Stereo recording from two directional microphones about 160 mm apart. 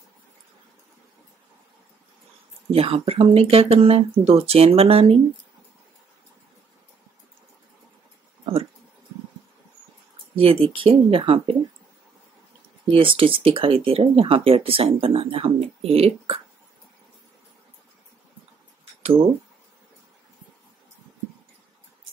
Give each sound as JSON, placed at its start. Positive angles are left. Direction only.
{"t": 2.7, "sound": "speech", "side_deg": -35}
{"t": 10.3, "sound": "speech", "side_deg": -35}
{"t": 12.9, "sound": "speech", "side_deg": -35}